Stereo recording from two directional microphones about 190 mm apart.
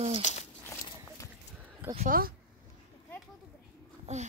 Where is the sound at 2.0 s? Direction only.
50° right (ahead or behind).